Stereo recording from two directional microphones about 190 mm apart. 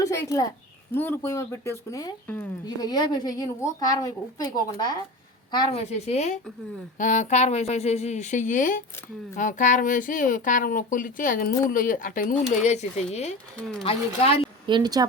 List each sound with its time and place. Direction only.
0.0 s a sound: 15° left (ahead or behind)
0.9 s speech: 10° left (ahead or behind)
2.6 s a woman's voice: 20° left (ahead or behind)
14.7 s speech: 20° right (ahead or behind)